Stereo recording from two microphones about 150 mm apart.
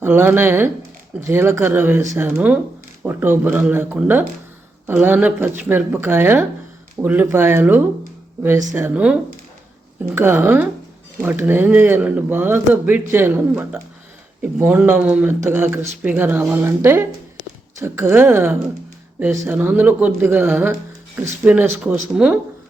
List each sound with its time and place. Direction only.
0.0 s speech: 15° right (ahead or behind)
10.2 s speech: 15° right (ahead or behind)